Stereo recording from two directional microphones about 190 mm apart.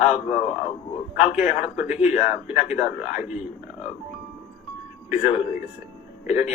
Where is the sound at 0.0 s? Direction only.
35° left (ahead or behind).